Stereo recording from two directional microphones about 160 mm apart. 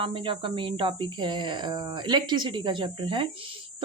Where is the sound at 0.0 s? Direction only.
35° right (ahead or behind).